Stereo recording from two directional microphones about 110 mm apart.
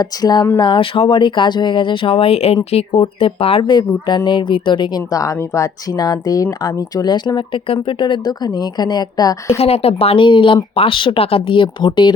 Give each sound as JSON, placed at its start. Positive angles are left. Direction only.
{"t": 0.0, "sound": "speech", "side_deg": 35}
{"t": 0.6, "sound": "speech", "side_deg": 50}
{"t": 3.6, "sound": "speech", "side_deg": 45}
{"t": 5.1, "sound": "speech", "side_deg": 35}
{"t": 9.6, "sound": "speech", "side_deg": 65}